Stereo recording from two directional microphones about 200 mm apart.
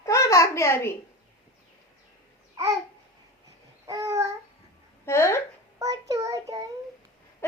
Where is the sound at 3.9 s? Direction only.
15° right (ahead or behind).